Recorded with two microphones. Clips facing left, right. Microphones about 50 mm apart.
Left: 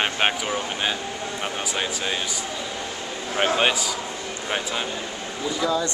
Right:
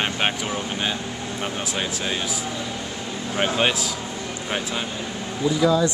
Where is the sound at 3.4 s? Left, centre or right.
Centre.